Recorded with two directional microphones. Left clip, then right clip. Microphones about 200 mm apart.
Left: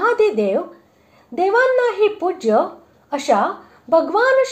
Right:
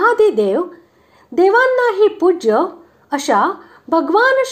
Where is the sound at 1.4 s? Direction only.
25° right (ahead or behind).